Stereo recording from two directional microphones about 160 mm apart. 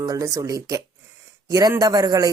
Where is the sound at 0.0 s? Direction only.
20° right (ahead or behind).